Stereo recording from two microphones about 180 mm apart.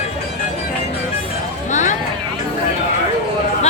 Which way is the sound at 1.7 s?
45° left (ahead or behind).